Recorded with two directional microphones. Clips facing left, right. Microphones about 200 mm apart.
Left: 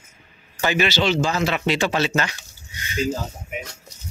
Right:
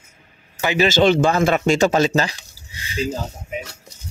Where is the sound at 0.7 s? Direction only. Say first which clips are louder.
Right 7 dB; 45° right (ahead or behind); by 3.1 s 30° right (ahead or behind).